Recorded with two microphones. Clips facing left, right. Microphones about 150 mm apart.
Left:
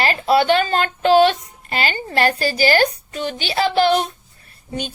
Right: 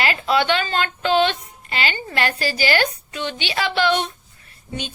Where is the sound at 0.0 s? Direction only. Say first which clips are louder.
Left 4 dB; 35° left (ahead or behind).